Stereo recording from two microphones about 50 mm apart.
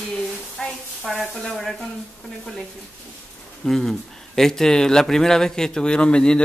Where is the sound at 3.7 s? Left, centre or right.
Centre.